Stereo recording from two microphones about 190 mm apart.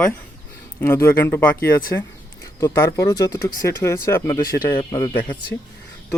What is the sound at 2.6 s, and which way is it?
Speech, 15° left (ahead or behind).